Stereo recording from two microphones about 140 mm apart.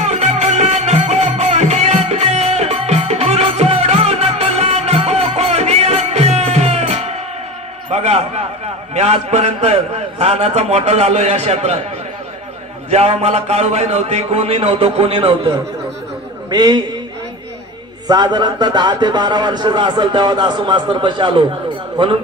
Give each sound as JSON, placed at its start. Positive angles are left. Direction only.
{"t": 0.0, "sound": "music", "side_deg": -50}
{"t": 7.9, "sound": "a sound", "side_deg": -50}
{"t": 8.9, "sound": "a man's voice", "side_deg": -50}
{"t": 12.9, "sound": "a man's voice", "side_deg": -50}
{"t": 16.4, "sound": "a man's voice", "side_deg": -30}
{"t": 18.0, "sound": "a man's voice", "side_deg": -30}